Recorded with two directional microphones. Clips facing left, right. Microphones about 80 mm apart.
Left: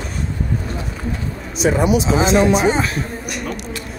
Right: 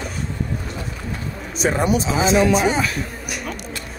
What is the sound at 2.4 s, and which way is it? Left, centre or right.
Speech, left.